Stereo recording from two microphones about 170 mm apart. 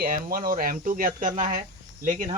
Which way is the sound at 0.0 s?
55° right (ahead or behind).